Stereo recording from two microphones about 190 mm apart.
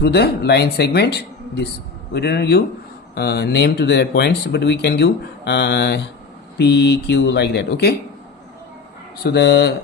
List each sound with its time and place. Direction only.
0.0 s speech: 60° left (ahead or behind)
9.2 s speech: 60° left (ahead or behind)